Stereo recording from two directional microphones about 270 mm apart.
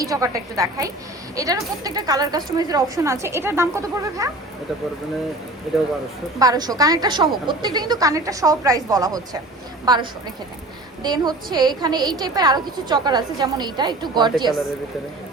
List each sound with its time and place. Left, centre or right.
0.0 s a woman's voice: centre
5.7 s speech: centre
6.4 s a woman's voice: centre